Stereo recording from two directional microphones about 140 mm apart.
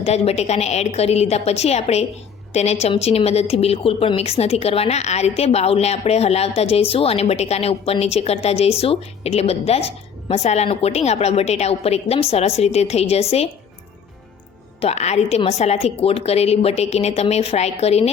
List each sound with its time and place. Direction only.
0.0 s a woman's voice: 50° left (ahead or behind)
14.8 s a woman's voice: 50° left (ahead or behind)